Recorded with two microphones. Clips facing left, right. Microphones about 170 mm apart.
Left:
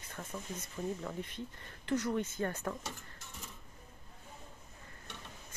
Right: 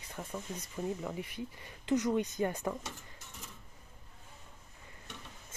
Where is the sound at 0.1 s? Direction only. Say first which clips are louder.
Right 2 dB; 15° right (ahead or behind).